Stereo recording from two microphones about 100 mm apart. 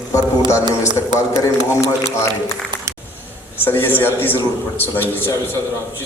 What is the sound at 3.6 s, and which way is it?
A man's voice, 20° left (ahead or behind).